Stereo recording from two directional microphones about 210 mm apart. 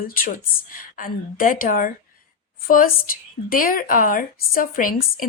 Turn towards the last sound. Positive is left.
turn(degrees=40)  # may be behind; listen again after turning